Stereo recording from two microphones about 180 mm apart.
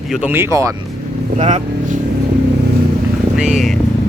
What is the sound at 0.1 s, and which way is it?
Speech, 10° right (ahead or behind).